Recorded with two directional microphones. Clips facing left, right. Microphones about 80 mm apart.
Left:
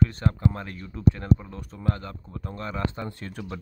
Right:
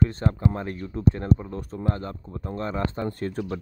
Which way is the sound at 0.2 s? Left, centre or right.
Right.